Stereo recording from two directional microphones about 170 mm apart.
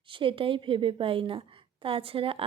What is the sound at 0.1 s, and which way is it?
A woman's voice, 30° right (ahead or behind).